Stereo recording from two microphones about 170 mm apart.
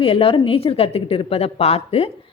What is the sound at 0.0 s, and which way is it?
Speech, 30° left (ahead or behind).